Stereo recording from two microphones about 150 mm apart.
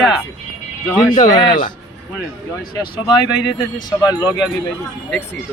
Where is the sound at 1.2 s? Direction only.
30° left (ahead or behind).